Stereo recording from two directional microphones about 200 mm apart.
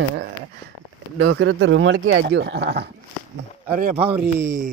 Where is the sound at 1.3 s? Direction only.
75° right (ahead or behind).